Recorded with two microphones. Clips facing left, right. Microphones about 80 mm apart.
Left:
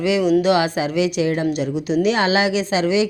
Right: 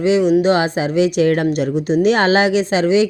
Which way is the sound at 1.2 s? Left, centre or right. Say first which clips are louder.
Right 4 dB; right.